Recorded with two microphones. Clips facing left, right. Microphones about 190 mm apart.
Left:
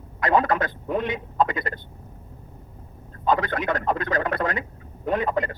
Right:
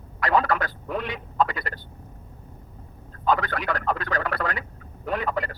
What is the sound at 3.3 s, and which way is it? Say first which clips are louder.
Speech: left 2 dB; 20° left (ahead or behind).